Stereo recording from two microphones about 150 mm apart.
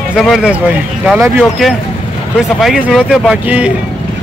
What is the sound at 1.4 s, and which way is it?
Speech, centre (ahead or behind).